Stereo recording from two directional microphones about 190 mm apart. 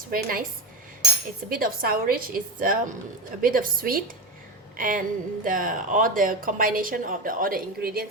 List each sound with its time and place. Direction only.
0.1 s speech: 50° right (ahead or behind)
1.5 s speech: 50° right (ahead or behind)